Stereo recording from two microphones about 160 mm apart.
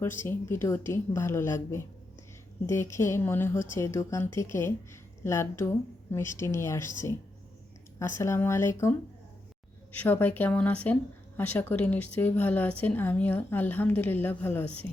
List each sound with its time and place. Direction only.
0.2 s a woman's voice: 15° left (ahead or behind)